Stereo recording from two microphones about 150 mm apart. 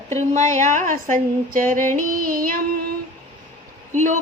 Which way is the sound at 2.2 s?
70° right (ahead or behind).